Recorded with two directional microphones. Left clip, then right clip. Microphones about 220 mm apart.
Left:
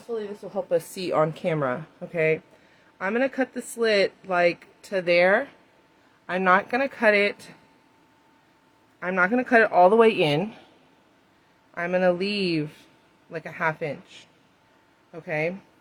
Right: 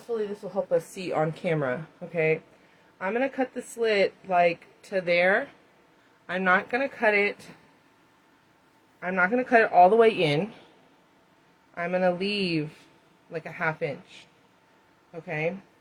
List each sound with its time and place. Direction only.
0.5 s speech: 45° left (ahead or behind)
9.0 s speech: 35° left (ahead or behind)
11.7 s speech: 30° left (ahead or behind)